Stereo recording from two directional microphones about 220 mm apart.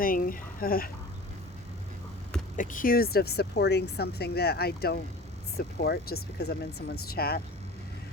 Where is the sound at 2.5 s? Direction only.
40° left (ahead or behind).